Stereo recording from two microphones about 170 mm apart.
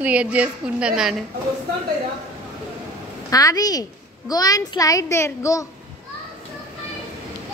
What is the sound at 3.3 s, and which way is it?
A woman's voice, 20° left (ahead or behind).